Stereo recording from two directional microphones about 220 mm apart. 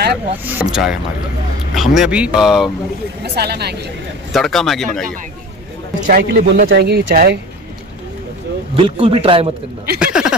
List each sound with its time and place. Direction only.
0.5 s speech: 5° right (ahead or behind)
3.3 s speech: 45° right (ahead or behind)
4.3 s speech: centre (ahead or behind)
6.0 s speech: 45° right (ahead or behind)
8.7 s a man's voice: 25° right (ahead or behind)
9.9 s speech: 5° right (ahead or behind)